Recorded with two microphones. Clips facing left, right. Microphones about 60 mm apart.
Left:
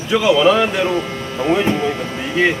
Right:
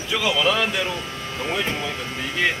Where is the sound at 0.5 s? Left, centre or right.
Left.